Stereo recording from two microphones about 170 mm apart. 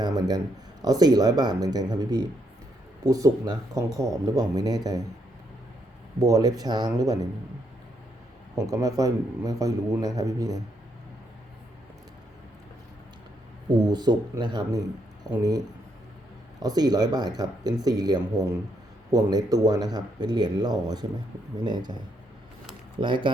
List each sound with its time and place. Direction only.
0.8 s speech: 25° right (ahead or behind)
6.1 s speech: 20° right (ahead or behind)
8.5 s speech: 20° right (ahead or behind)
13.7 s speech: 25° right (ahead or behind)
23.0 s speech: 30° right (ahead or behind)